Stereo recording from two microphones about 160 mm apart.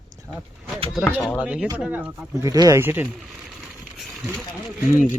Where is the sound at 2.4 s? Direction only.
20° right (ahead or behind).